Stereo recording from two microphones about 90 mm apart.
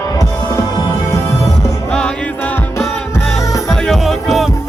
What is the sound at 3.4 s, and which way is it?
Music, 40° left (ahead or behind).